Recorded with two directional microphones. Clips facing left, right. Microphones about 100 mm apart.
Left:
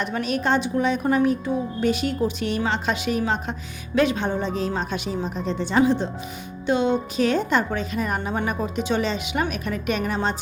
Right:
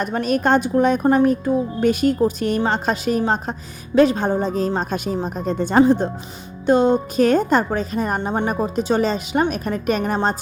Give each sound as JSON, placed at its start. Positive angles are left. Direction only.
{"t": 0.0, "sound": "a woman's voice", "side_deg": -45}